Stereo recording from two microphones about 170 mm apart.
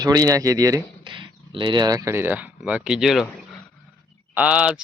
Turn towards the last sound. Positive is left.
turn(degrees=-5)  # may be behind; listen again after turning